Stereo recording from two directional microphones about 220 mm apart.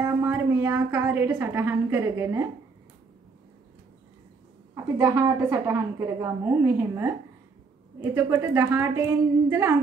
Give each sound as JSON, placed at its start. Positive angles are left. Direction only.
{"t": 0.0, "sound": "a woman's voice", "side_deg": -10}
{"t": 4.7, "sound": "a woman's voice", "side_deg": -10}